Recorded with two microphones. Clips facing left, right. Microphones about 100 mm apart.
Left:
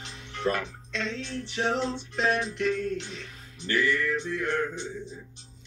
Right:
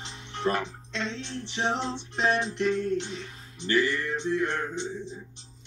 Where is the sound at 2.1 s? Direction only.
30° right (ahead or behind).